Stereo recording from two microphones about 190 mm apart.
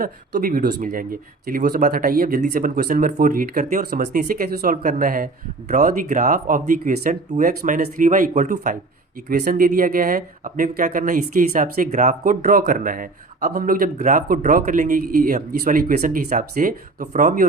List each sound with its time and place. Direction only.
0.0 s speech: 50° right (ahead or behind)